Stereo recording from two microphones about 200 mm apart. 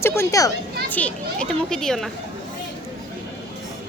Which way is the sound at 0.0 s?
15° left (ahead or behind).